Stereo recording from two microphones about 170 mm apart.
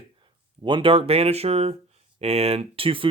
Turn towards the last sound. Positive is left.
turn(degrees=-30)  # may be behind; listen again after turning